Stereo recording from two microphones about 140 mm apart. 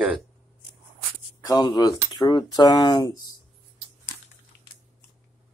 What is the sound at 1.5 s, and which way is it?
Speech, 30° left (ahead or behind).